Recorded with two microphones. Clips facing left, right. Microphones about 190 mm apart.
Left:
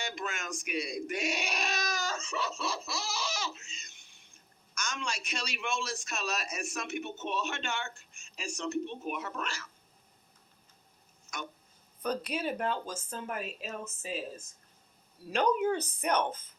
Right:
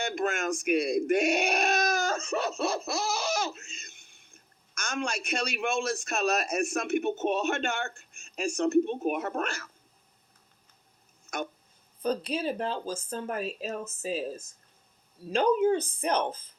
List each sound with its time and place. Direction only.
0.0 s a man's voice: 50° right (ahead or behind)
11.3 s speech: 55° right (ahead or behind)
12.0 s speech: 30° right (ahead or behind)
15.3 s a woman's voice: 30° right (ahead or behind)